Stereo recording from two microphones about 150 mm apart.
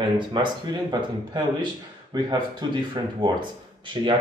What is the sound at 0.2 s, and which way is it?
Speech, 30° right (ahead or behind).